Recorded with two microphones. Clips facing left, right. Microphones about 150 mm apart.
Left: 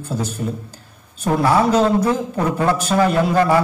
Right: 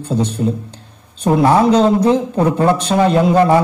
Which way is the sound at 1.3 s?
25° right (ahead or behind).